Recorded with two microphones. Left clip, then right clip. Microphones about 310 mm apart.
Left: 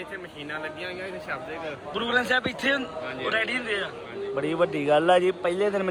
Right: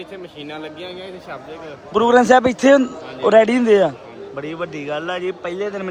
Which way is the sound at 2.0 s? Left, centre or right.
Right.